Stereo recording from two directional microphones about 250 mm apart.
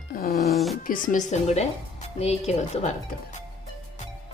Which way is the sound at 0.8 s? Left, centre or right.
Left.